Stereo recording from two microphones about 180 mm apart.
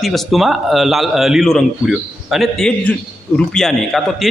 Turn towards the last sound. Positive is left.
turn(degrees=0)  # may be behind; listen again after turning